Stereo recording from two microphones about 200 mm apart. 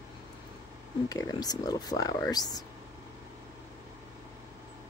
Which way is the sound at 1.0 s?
20° left (ahead or behind).